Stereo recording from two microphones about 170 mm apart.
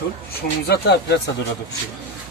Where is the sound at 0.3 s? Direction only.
75° left (ahead or behind).